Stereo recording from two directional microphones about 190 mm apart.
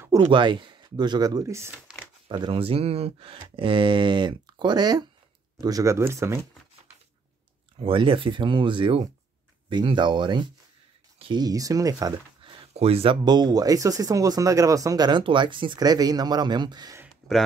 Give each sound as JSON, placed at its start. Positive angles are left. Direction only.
{"t": 0.3, "sound": "speech", "side_deg": -25}
{"t": 1.9, "sound": "a sound", "side_deg": -5}
{"t": 2.2, "sound": "speech", "side_deg": -25}
{"t": 7.8, "sound": "speech", "side_deg": -30}
{"t": 12.7, "sound": "speech", "side_deg": -30}
{"t": 17.2, "sound": "speech", "side_deg": 0}